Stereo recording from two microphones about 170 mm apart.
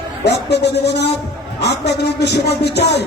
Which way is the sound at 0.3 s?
80° left.